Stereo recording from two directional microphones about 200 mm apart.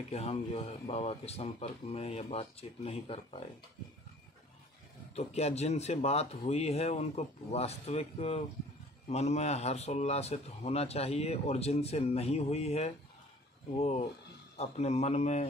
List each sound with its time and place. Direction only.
0.1 s speech: 30° left (ahead or behind)
5.1 s speech: 30° left (ahead or behind)
14.6 s speech: 35° left (ahead or behind)